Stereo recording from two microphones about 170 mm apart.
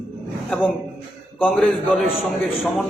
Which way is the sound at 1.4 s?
Centre (ahead or behind).